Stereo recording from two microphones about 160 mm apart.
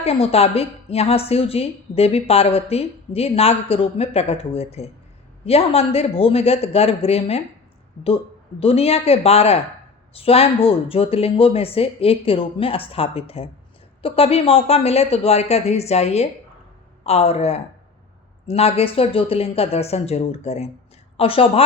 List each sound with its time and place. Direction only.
0.0 s a woman's voice: 40° left (ahead or behind)